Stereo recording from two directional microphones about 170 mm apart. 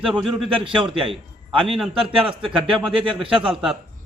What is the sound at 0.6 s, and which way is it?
Speech, 30° right (ahead or behind).